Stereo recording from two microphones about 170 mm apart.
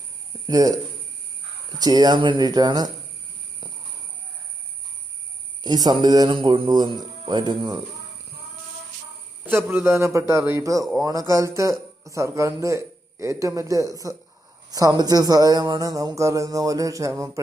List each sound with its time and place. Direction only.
0.4 s speech: 20° right (ahead or behind)
1.8 s speech: 25° right (ahead or behind)
5.6 s speech: 25° right (ahead or behind)
9.5 s a man's voice: 10° right (ahead or behind)